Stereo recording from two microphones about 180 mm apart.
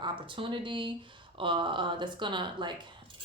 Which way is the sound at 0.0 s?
30° right (ahead or behind).